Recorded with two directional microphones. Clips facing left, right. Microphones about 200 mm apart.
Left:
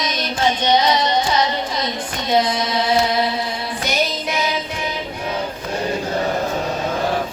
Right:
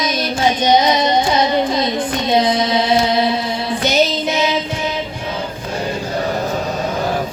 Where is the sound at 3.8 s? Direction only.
25° right (ahead or behind).